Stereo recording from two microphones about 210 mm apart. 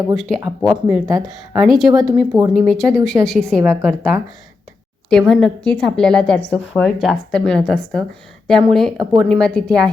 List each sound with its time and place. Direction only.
0.4 s a woman's voice: centre (ahead or behind)
1.9 s speech: 20° right (ahead or behind)
2.5 s a woman's voice: centre (ahead or behind)
3.6 s a woman's voice: 10° right (ahead or behind)
5.0 s a woman's voice: 5° left (ahead or behind)